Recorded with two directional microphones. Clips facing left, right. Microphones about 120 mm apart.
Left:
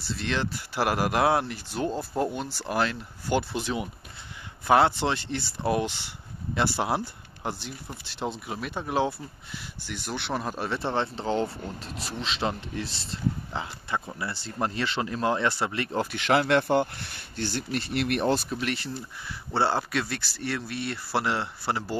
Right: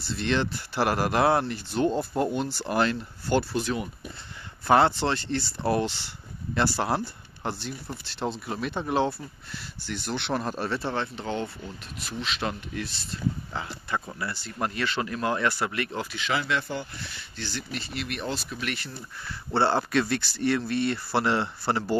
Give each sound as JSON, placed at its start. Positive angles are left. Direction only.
{"t": 0.1, "sound": "speech", "side_deg": 5}
{"t": 3.3, "sound": "speech", "side_deg": 20}
{"t": 4.6, "sound": "speech", "side_deg": 5}
{"t": 16.1, "sound": "speech", "side_deg": 60}
{"t": 18.5, "sound": "speech", "side_deg": 30}
{"t": 19.2, "sound": "speech", "side_deg": 5}